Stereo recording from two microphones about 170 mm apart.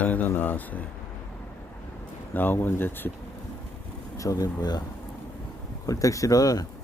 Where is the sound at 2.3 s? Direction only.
10° left (ahead or behind).